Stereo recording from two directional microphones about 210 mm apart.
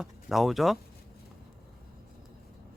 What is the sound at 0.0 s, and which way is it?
Speech, centre (ahead or behind).